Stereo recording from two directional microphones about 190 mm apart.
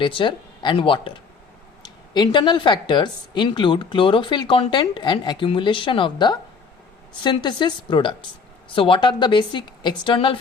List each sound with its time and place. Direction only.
0.0 s speech: 25° left (ahead or behind)